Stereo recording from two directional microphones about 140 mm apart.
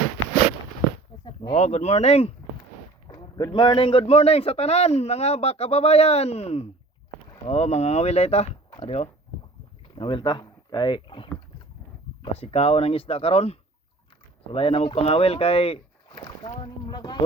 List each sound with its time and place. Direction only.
1.5 s speech: 55° left (ahead or behind)
3.1 s speech: 30° left (ahead or behind); by 8.4 s 50° left (ahead or behind)
8.7 s door: 40° left (ahead or behind)
9.9 s speech: 35° left (ahead or behind)
16.1 s speech: 30° left (ahead or behind)